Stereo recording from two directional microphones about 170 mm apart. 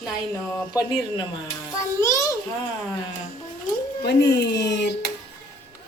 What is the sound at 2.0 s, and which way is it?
Speech, 20° left (ahead or behind).